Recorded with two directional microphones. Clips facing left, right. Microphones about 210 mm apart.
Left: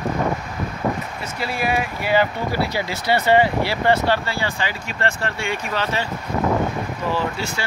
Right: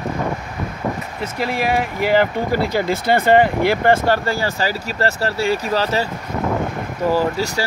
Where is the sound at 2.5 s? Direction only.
50° right (ahead or behind).